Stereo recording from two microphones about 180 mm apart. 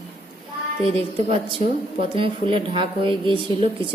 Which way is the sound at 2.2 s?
30° right (ahead or behind).